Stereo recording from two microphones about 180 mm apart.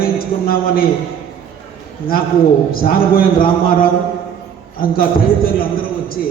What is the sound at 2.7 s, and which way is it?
Speech, 55° left (ahead or behind).